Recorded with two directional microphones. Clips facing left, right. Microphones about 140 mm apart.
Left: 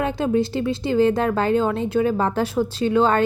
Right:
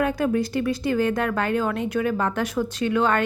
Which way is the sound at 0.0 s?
25° left (ahead or behind).